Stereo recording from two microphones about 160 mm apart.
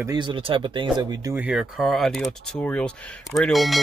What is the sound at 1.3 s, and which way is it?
Speech, 5° right (ahead or behind).